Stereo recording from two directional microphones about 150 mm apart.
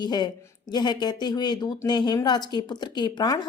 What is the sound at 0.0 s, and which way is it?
A woman's voice, 30° left (ahead or behind).